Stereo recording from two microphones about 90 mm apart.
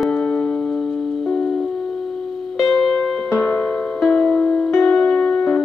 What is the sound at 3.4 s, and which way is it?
Music, 20° left (ahead or behind).